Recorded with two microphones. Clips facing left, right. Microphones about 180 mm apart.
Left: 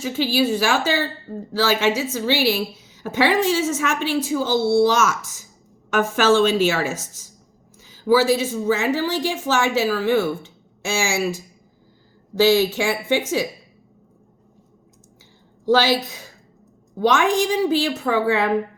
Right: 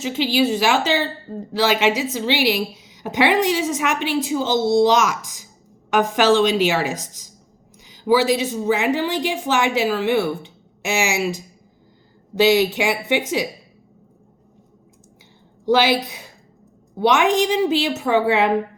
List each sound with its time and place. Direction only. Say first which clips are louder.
0.3 s speech: right 2 dB; 20° right (ahead or behind)
15.7 s a woman's voice: right 1 dB; 15° right (ahead or behind)
17.4 s speech: right 1 dB; 20° right (ahead or behind)